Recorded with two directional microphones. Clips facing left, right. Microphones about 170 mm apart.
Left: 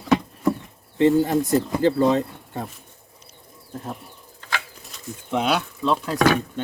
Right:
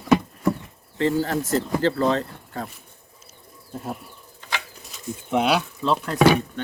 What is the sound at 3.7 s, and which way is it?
Speech, 5° right (ahead or behind).